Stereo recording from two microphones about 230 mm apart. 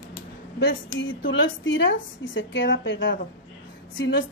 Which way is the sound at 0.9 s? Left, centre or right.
Left.